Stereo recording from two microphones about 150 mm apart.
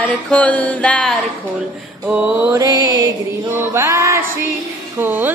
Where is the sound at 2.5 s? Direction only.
25° right (ahead or behind).